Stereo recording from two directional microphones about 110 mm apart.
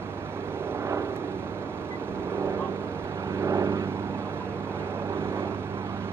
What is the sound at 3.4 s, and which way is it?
Vehicle, 25° right (ahead or behind).